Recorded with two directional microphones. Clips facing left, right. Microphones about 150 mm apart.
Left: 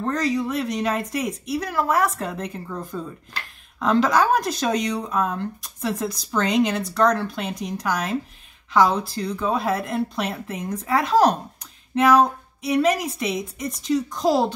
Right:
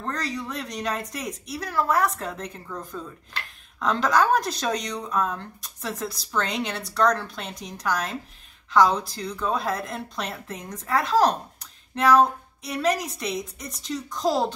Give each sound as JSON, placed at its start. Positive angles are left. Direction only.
{"t": 0.0, "sound": "speech", "side_deg": 10}
{"t": 3.8, "sound": "speech", "side_deg": 5}